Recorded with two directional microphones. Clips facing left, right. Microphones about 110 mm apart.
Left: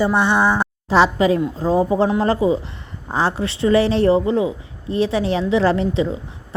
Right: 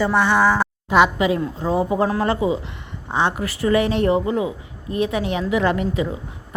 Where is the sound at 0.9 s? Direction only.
30° left (ahead or behind).